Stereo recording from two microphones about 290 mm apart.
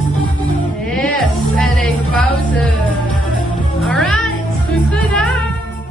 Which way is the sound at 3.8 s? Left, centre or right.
Centre.